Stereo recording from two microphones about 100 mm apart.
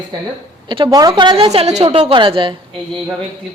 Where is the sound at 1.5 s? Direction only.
90° right; by 2.6 s 60° right (ahead or behind).